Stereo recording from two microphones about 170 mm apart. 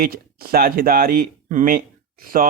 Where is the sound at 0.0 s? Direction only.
60° right (ahead or behind).